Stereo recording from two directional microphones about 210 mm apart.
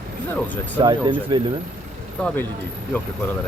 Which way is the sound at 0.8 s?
25° right (ahead or behind).